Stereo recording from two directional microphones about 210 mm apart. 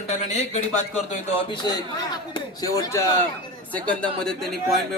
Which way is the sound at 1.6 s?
20° left (ahead or behind).